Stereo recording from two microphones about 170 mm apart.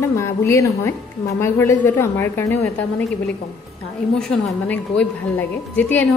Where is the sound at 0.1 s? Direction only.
15° left (ahead or behind).